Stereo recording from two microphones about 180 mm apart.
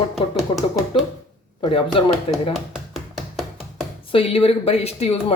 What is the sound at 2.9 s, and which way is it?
Music, centre (ahead or behind).